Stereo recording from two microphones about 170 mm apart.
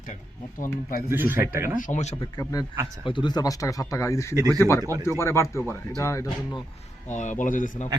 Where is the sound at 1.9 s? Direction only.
40° left (ahead or behind).